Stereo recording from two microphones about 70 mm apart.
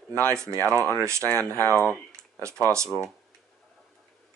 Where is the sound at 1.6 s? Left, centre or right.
Left.